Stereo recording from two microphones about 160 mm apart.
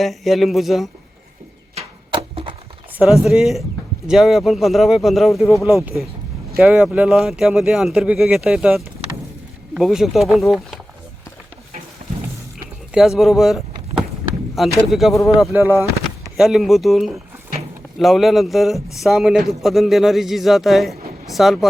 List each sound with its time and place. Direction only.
0.0 s a man's voice: centre (ahead or behind)
1.7 s a sound: 35° right (ahead or behind)
3.2 s a man's voice: centre (ahead or behind)
12.9 s a man's voice: centre (ahead or behind)
15.5 s speech: 10° right (ahead or behind)
16.4 s a man's voice: centre (ahead or behind)